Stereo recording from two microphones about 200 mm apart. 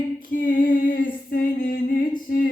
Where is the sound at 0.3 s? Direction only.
45° left (ahead or behind).